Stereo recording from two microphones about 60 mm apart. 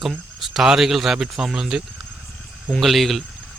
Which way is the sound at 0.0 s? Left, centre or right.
Centre.